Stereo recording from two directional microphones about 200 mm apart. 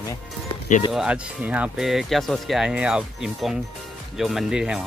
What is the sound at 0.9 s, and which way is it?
Speech, 5° right (ahead or behind).